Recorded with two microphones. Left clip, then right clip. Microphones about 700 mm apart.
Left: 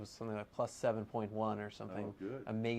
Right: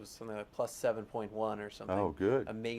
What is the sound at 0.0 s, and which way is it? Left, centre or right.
Speech, left.